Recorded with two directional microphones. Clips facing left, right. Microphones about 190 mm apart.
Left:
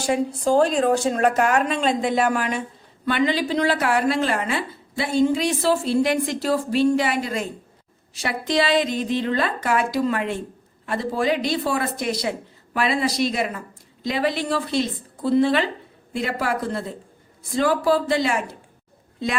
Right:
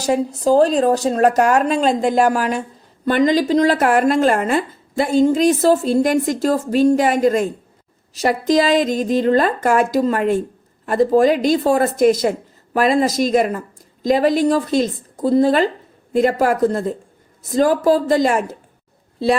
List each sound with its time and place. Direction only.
0.0 s speech: 40° right (ahead or behind)